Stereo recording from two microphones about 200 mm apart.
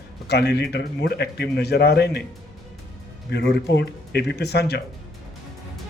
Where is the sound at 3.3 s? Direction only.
55° left (ahead or behind).